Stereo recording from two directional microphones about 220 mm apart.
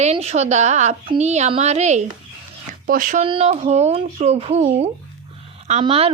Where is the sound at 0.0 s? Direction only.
30° right (ahead or behind).